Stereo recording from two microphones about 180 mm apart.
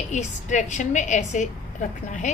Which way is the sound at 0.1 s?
40° left (ahead or behind).